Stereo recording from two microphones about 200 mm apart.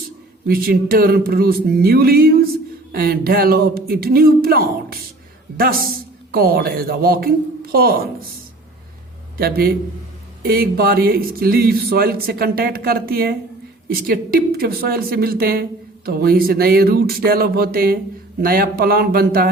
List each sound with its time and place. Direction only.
0.4 s speech: 50° right (ahead or behind)
6.3 s speech: 50° right (ahead or behind)
9.4 s speech: 50° right (ahead or behind)